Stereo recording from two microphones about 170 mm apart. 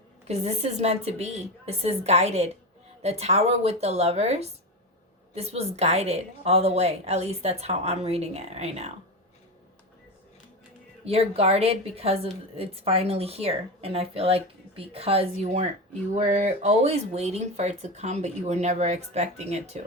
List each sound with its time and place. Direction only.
0.3 s a woman's voice: 40° right (ahead or behind)
11.0 s a woman's voice: 35° right (ahead or behind)